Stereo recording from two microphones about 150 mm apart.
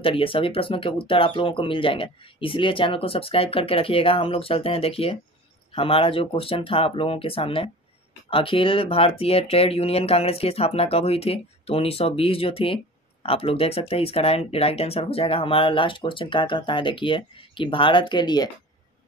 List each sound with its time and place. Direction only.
0.0 s speech: 35° left (ahead or behind)